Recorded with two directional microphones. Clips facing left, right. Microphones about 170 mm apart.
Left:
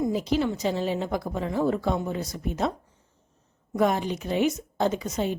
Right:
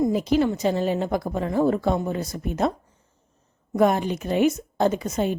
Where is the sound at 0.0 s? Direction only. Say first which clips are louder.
Right 4 dB; 50° right (ahead or behind).